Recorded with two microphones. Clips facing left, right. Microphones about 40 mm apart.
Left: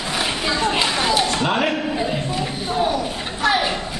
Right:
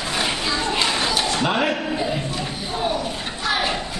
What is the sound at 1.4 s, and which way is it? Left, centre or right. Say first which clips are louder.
Speech: left 1 dB; centre.